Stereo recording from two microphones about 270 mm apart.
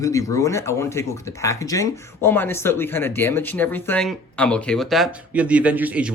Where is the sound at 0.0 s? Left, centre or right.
Centre.